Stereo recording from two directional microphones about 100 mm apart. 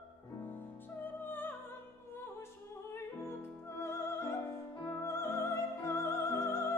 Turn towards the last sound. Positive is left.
turn(degrees=25)  # may be behind; listen again after turning